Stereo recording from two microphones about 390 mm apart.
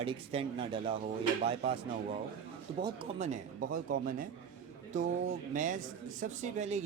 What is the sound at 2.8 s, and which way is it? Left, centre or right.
Speech, centre.